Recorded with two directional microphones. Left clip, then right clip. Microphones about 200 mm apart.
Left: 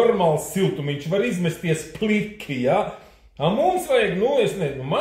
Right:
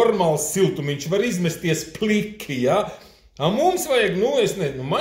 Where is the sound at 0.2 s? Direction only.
20° right (ahead or behind).